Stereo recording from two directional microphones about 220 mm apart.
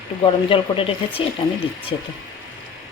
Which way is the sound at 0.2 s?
25° left (ahead or behind).